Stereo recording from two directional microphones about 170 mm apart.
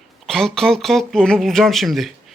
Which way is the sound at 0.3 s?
Centre (ahead or behind).